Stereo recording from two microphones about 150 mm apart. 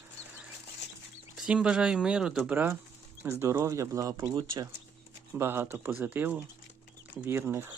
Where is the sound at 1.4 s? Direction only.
5° right (ahead or behind).